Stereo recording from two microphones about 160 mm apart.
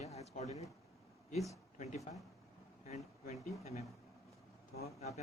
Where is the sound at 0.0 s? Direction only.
45° left (ahead or behind).